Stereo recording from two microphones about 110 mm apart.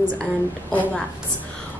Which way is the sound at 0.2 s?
5° left (ahead or behind).